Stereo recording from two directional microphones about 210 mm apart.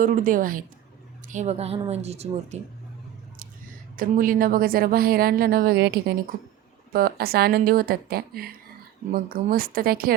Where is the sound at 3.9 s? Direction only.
40° right (ahead or behind).